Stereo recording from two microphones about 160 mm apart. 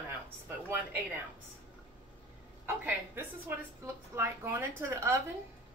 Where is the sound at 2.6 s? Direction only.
10° right (ahead or behind).